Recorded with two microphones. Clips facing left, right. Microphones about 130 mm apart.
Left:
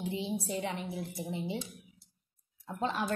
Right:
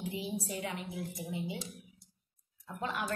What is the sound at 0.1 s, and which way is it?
A woman's voice, 25° left (ahead or behind).